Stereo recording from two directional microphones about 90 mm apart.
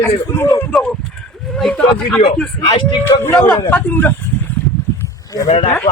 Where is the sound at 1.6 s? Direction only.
5° left (ahead or behind).